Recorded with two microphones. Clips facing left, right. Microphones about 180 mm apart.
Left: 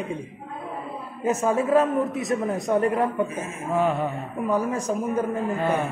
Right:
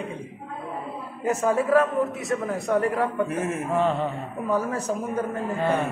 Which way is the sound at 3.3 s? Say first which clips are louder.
Right 5 dB; 70° right (ahead or behind).